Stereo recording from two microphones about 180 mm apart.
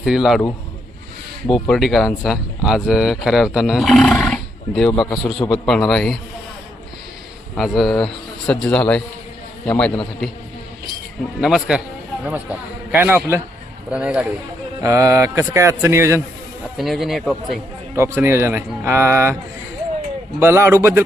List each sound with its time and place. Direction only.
0.0 s speech: centre (ahead or behind)
1.5 s a man's voice: centre (ahead or behind)
7.5 s a man's voice: centre (ahead or behind)
11.3 s speech: 5° right (ahead or behind)
14.8 s speech: 15° right (ahead or behind)
16.7 s speech: centre (ahead or behind)
17.9 s speech: 15° right (ahead or behind)
20.4 s speech: 15° right (ahead or behind)